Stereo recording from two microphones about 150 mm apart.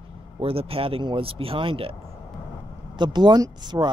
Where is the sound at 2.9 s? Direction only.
30° right (ahead or behind).